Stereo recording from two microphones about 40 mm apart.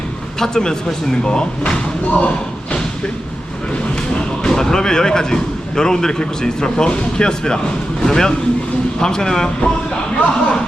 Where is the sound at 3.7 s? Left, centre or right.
Centre.